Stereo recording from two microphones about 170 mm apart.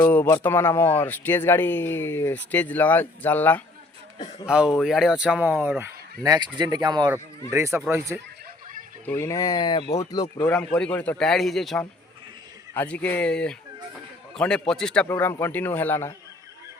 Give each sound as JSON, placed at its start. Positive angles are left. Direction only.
{"t": 0.0, "sound": "speech", "side_deg": 15}
{"t": 4.4, "sound": "speech", "side_deg": -5}
{"t": 6.2, "sound": "speech", "side_deg": -25}
{"t": 9.0, "sound": "speech", "side_deg": 15}
{"t": 10.4, "sound": "speech", "side_deg": 5}
{"t": 15.0, "sound": "speech", "side_deg": 15}